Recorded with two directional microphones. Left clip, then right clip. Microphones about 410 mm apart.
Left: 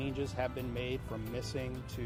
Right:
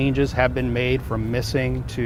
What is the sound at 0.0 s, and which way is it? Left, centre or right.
Speech, right.